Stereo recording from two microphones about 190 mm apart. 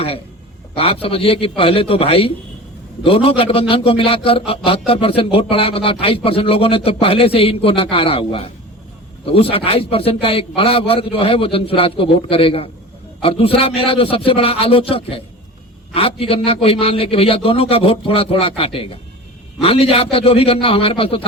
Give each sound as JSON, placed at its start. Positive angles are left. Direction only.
{"t": 1.0, "sound": "speech", "side_deg": 30}